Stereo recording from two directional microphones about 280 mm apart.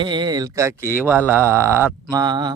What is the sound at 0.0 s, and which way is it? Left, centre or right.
Speech, centre.